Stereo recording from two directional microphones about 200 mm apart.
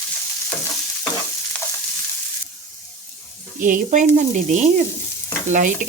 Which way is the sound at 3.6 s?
40° right (ahead or behind).